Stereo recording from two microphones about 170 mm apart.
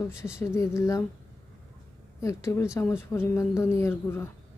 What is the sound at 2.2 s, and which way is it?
A woman's voice, 15° left (ahead or behind).